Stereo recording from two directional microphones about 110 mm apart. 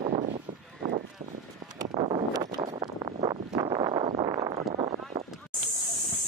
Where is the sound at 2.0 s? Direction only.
50° right (ahead or behind).